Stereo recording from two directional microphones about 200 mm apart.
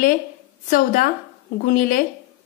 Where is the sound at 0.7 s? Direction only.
40° left (ahead or behind).